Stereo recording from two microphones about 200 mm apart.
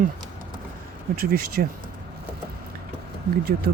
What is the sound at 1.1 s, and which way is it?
Speech, 50° right (ahead or behind).